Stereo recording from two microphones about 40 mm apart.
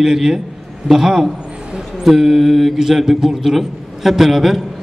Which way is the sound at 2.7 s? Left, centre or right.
Centre.